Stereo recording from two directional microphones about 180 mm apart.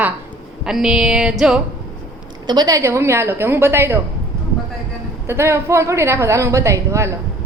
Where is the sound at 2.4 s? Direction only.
20° right (ahead or behind).